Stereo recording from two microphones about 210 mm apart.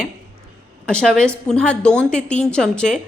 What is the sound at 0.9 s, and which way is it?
A woman's voice, 5° left (ahead or behind).